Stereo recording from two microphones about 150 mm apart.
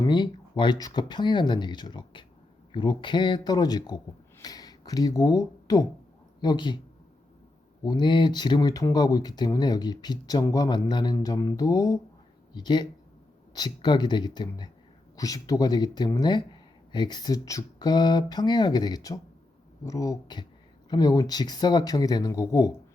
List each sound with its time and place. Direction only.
0.1 s a man's voice: 30° left (ahead or behind)
7.9 s speech: 30° left (ahead or behind)